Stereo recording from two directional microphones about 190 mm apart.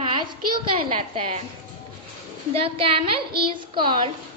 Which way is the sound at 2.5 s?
30° right (ahead or behind).